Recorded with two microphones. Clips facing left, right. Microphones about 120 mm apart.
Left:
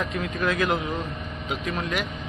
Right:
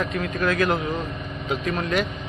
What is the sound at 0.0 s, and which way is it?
A man's voice, 15° left (ahead or behind).